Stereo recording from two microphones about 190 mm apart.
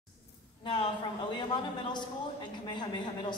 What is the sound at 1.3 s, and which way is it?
A man's voice, 25° left (ahead or behind).